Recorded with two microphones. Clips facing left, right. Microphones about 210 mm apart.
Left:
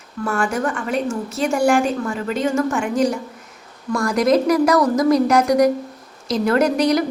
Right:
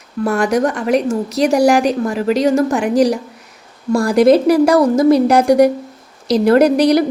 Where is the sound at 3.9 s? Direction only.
30° right (ahead or behind).